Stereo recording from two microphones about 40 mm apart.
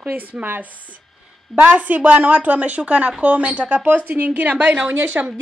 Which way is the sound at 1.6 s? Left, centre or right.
Right.